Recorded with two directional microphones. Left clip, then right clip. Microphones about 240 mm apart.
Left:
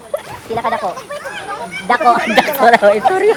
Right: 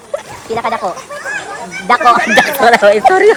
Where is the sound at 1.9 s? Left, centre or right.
Right.